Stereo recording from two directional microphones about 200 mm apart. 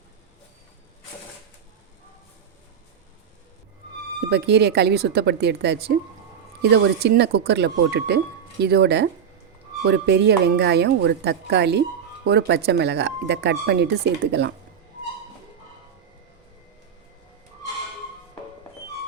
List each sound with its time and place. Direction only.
4.3 s a woman's voice: 55° right (ahead or behind)